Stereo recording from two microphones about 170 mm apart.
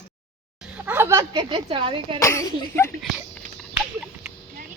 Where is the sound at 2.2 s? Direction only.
20° left (ahead or behind).